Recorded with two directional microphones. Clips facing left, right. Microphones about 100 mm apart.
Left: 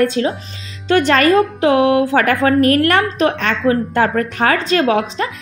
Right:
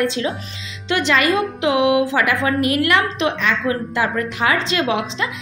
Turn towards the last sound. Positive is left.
turn(degrees=40)  # may be behind; listen again after turning